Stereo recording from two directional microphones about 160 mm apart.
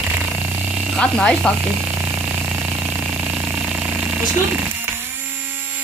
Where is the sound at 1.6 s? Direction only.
10° right (ahead or behind).